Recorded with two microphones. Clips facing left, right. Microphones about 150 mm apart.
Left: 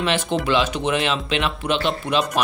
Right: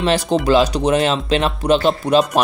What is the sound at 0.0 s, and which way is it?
Speech, 40° right (ahead or behind).